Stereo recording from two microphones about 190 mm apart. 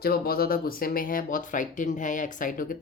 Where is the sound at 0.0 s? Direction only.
55° left (ahead or behind).